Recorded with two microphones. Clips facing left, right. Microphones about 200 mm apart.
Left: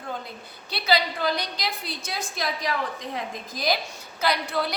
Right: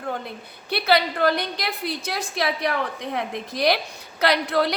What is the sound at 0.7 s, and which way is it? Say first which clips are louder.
A woman's voice: right 4 dB; 60° right (ahead or behind).